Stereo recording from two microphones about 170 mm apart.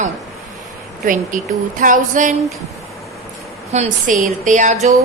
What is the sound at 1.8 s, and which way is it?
Speech, 50° right (ahead or behind).